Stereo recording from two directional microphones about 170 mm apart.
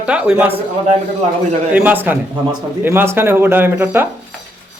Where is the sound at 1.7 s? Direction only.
10° right (ahead or behind).